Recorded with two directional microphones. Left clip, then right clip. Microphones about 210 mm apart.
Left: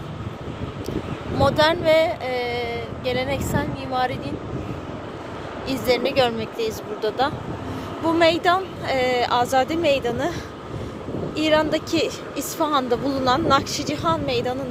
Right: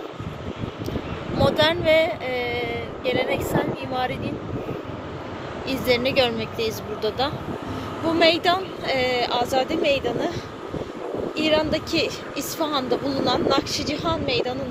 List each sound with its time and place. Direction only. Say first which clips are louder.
1.4 s speech: left 2 dB; 10° left (ahead or behind)
5.6 s a woman's voice: even; 15° left (ahead or behind)
11.3 s a woman's voice: left 2 dB; 25° left (ahead or behind)